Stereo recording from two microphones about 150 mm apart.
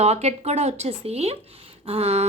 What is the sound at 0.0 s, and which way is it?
Speech, 45° right (ahead or behind).